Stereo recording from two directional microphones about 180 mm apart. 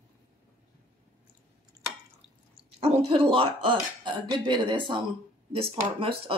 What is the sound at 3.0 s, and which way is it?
Speech, 30° right (ahead or behind).